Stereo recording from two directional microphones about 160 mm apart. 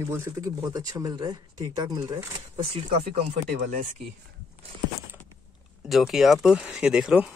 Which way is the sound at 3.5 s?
55° right (ahead or behind).